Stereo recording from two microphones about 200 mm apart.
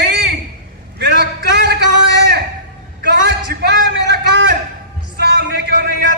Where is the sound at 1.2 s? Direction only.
55° right (ahead or behind).